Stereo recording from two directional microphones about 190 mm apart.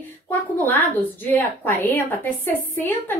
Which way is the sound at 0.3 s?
10° left (ahead or behind).